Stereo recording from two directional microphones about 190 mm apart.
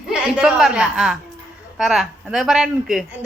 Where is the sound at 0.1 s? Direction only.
5° right (ahead or behind).